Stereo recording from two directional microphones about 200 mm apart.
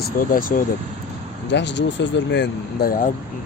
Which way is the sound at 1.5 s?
60° left (ahead or behind).